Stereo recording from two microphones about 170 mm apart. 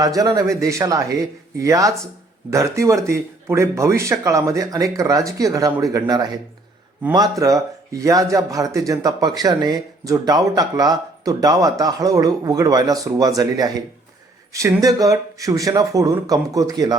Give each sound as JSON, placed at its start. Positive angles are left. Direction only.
{"t": 0.0, "sound": "speech", "side_deg": -20}